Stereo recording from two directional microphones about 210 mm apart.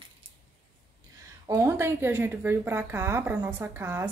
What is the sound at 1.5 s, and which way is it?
Speech, 10° right (ahead or behind).